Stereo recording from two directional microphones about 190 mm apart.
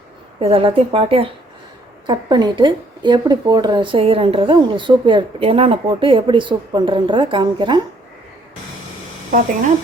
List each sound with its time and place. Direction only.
0.3 s speech: 30° right (ahead or behind)